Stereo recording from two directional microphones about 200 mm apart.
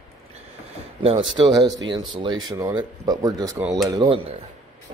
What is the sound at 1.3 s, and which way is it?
Speech, 20° right (ahead or behind).